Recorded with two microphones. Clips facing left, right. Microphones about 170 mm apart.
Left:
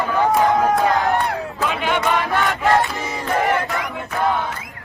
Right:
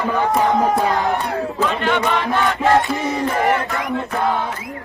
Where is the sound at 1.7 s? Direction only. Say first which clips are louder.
Right 2 dB; 5° left (ahead or behind).